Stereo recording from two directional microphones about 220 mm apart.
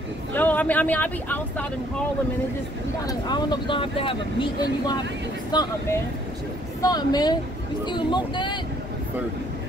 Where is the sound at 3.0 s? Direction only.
20° left (ahead or behind).